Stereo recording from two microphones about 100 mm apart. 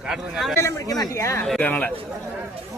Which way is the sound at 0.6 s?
30° left (ahead or behind).